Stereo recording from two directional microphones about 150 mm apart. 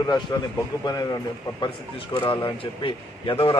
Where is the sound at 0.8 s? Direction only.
25° left (ahead or behind).